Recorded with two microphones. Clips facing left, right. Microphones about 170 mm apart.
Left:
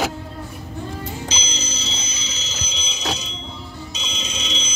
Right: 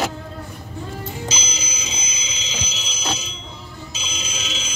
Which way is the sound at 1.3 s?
10° right (ahead or behind).